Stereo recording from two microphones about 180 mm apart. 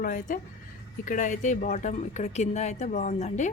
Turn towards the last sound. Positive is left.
turn(degrees=40)  # may be behind; listen again after turning